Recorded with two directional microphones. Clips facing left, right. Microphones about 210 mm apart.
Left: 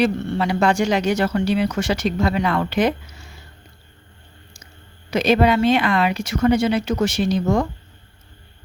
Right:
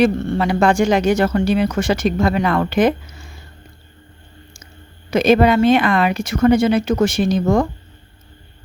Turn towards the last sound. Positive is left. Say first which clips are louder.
# right 3 dB
turn(degrees=-50)  # may be behind; listen again after turning